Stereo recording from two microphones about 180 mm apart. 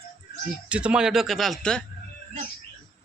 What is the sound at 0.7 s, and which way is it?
Speech, 5° right (ahead or behind).